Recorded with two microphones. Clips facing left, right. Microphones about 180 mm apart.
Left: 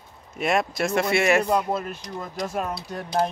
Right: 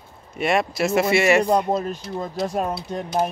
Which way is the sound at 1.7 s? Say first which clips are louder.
Right 4 dB; 35° right (ahead or behind).